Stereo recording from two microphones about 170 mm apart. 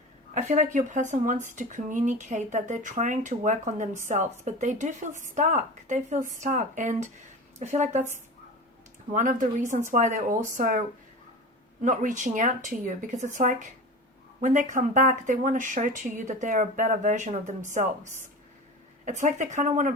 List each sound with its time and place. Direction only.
0.5 s speech: 50° right (ahead or behind)
9.1 s speech: 50° right (ahead or behind)